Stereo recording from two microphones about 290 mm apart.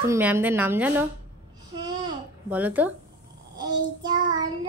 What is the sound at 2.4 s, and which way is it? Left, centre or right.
Speech, centre.